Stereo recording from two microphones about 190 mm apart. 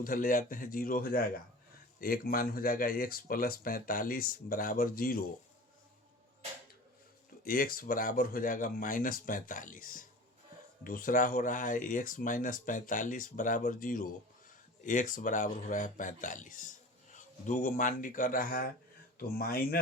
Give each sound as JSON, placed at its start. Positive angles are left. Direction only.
{"t": 0.0, "sound": "speech", "side_deg": 45}
{"t": 7.4, "sound": "speech", "side_deg": 50}